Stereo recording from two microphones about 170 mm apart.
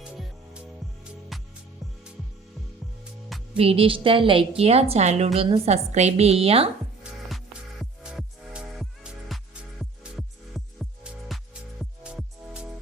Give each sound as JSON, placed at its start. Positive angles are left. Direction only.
{"t": 0.0, "sound": "music", "side_deg": -5}
{"t": 3.0, "sound": "music", "side_deg": 0}
{"t": 3.5, "sound": "a woman's voice", "side_deg": -35}
{"t": 7.0, "sound": "music", "side_deg": 0}